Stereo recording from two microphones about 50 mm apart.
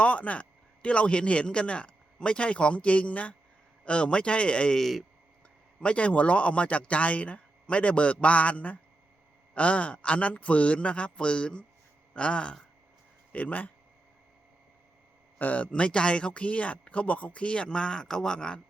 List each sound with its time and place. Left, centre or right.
0.0 s speech: left
4.8 s speech: centre
5.8 s speech: left
15.4 s speech: left